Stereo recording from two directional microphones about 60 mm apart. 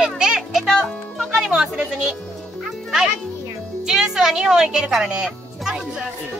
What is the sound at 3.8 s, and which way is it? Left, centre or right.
A woman's voice, centre.